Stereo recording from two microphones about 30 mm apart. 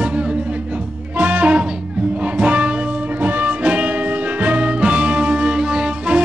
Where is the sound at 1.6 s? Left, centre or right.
Right.